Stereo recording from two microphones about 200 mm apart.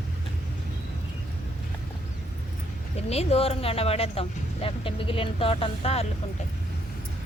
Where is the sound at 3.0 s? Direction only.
30° left (ahead or behind).